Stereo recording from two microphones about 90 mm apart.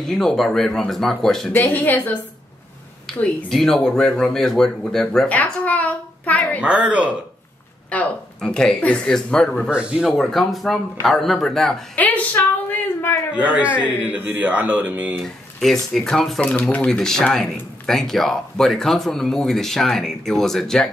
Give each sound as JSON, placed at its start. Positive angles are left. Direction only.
{"t": 0.0, "sound": "speech", "side_deg": 5}
{"t": 1.5, "sound": "speech", "side_deg": 20}
{"t": 3.1, "sound": "a sound", "side_deg": 5}
{"t": 3.4, "sound": "speech", "side_deg": 5}
{"t": 5.3, "sound": "a sound", "side_deg": 15}
{"t": 6.6, "sound": "speech", "side_deg": -15}
{"t": 7.9, "sound": "speech", "side_deg": 15}
{"t": 9.7, "sound": "speech", "side_deg": -10}
{"t": 10.1, "sound": "speech", "side_deg": 0}
{"t": 11.9, "sound": "a sound", "side_deg": 15}
{"t": 13.3, "sound": "speech", "side_deg": -15}
{"t": 15.1, "sound": "speech", "side_deg": 5}